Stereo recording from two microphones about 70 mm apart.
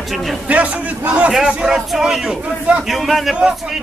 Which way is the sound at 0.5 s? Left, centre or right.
Centre.